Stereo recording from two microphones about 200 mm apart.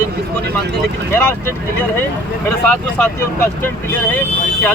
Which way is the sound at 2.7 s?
10° left (ahead or behind).